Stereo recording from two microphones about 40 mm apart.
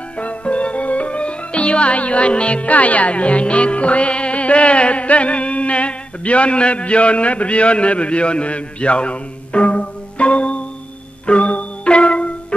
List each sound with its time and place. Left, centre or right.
0.2 s music: left